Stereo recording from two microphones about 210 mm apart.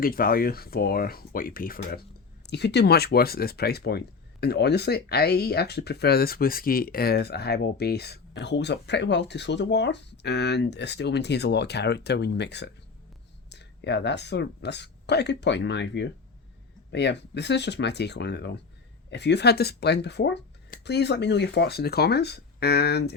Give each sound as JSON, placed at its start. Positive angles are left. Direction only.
{"t": 0.0, "sound": "speech", "side_deg": 45}